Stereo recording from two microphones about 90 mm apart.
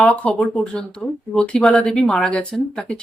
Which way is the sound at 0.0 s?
15° left (ahead or behind).